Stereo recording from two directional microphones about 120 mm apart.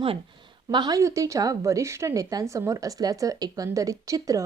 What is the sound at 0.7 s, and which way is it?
A woman's voice, 35° right (ahead or behind).